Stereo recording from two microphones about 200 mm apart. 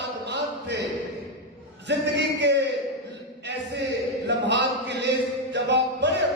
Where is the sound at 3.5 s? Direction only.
60° right (ahead or behind).